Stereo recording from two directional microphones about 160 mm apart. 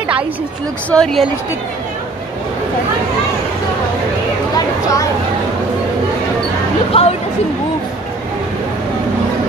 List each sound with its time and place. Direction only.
0.8 s speech: 5° left (ahead or behind)
6.9 s speech: 40° left (ahead or behind)